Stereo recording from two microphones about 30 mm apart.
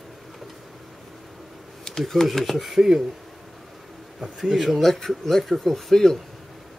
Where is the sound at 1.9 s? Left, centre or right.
Centre.